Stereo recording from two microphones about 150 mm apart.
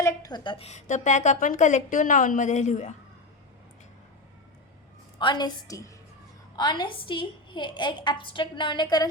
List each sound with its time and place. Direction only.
0.0 s a woman's voice: 25° left (ahead or behind); by 2.9 s 55° left (ahead or behind)
5.2 s a woman's voice: 30° left (ahead or behind)